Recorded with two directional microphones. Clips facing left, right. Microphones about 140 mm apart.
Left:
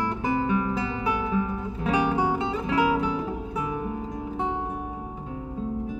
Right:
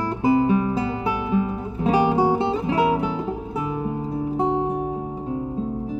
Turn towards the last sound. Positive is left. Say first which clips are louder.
# right 7 dB
turn(degrees=-35)  # may be behind; listen again after turning